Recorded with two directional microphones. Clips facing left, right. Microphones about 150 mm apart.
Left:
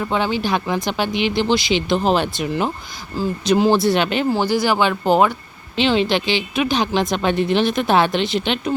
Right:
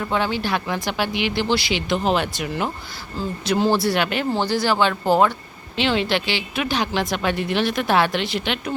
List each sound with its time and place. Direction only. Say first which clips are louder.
0.1 s a woman's voice: left 2 dB; 20° left (ahead or behind)
4.3 s a woman's voice: left 3 dB; 10° left (ahead or behind)